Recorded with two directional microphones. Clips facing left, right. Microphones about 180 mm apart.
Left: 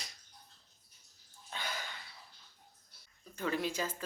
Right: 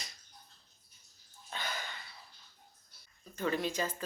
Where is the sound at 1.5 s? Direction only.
10° left (ahead or behind).